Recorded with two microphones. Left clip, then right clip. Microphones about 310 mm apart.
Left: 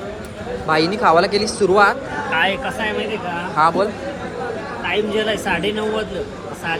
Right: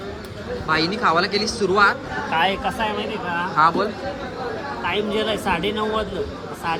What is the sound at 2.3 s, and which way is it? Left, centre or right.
Speech, right.